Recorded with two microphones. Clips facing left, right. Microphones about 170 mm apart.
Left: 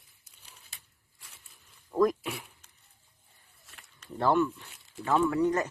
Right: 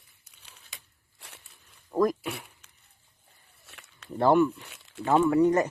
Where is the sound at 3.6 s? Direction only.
75° right (ahead or behind).